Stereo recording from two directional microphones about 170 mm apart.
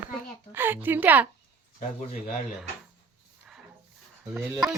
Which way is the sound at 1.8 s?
45° left (ahead or behind).